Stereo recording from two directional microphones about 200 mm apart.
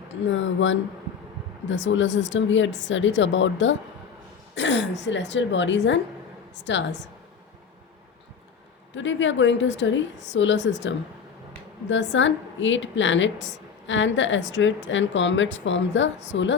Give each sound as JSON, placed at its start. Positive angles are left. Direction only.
{"t": 0.3, "sound": "a woman's voice", "side_deg": 70}
{"t": 9.0, "sound": "a woman's voice", "side_deg": 65}